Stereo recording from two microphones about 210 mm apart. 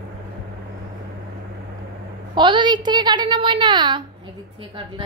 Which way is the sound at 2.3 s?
20° right (ahead or behind).